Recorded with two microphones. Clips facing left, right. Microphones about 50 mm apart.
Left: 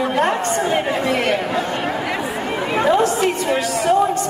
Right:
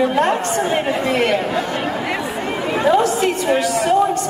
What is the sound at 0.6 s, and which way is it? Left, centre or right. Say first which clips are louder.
Speech: even; centre.